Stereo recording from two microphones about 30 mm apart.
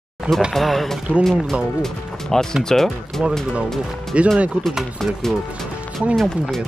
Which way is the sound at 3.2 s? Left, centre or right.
Centre.